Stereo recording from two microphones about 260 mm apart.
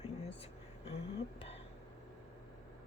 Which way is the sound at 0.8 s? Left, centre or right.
Left.